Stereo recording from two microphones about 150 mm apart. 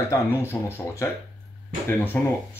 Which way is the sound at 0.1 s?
15° left (ahead or behind).